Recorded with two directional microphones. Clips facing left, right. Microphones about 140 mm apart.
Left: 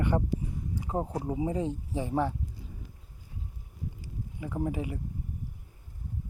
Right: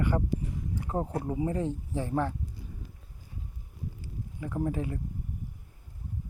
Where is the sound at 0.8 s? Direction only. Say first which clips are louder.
Even; 15° left (ahead or behind).